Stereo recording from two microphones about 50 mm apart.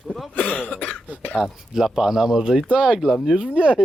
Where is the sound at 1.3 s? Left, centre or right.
Centre.